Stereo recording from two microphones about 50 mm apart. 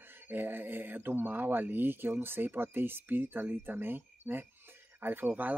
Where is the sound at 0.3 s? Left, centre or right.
Right.